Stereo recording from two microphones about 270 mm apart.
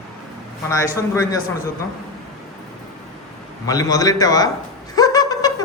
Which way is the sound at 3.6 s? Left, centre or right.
Centre.